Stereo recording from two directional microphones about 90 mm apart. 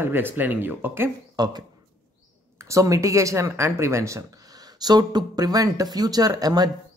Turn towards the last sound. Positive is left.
turn(degrees=-45)  # may be behind; listen again after turning